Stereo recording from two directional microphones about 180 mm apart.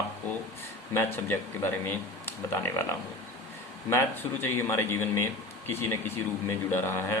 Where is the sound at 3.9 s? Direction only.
15° left (ahead or behind).